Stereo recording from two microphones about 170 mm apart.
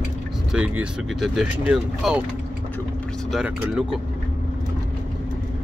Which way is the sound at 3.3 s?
5° right (ahead or behind).